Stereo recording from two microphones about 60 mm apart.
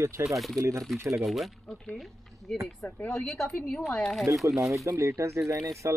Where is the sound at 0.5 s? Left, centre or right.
Right.